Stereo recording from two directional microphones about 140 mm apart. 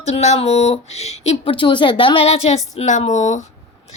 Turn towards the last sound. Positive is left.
turn(degrees=60)  # may be behind; listen again after turning